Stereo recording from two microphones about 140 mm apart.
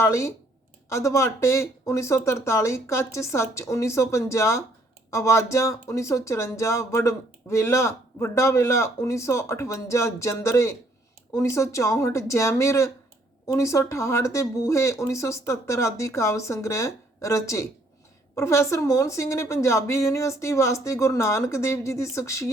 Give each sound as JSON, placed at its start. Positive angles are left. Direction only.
{"t": 0.0, "sound": "speech", "side_deg": 20}